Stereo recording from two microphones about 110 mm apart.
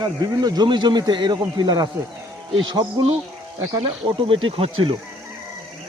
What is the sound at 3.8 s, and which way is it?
Speech, 50° right (ahead or behind).